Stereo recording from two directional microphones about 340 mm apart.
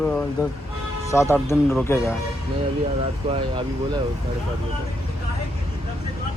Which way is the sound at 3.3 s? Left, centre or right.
Centre.